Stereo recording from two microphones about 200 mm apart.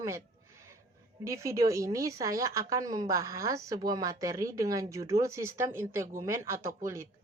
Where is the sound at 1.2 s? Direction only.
15° right (ahead or behind).